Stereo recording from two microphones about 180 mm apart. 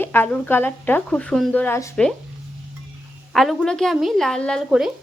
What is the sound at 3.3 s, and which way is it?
A woman's voice, centre (ahead or behind).